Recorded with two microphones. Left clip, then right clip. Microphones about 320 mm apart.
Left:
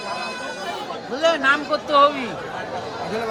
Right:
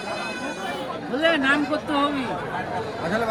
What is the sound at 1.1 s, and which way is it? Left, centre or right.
Speech, centre.